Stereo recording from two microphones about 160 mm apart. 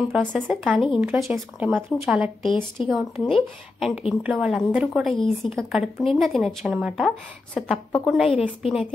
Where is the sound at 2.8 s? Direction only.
Centre (ahead or behind).